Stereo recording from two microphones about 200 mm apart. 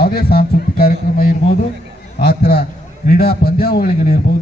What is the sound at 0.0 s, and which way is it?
A man's voice, 50° left (ahead or behind).